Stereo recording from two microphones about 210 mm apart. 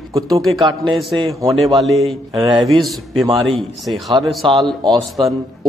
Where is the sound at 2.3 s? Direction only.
20° right (ahead or behind).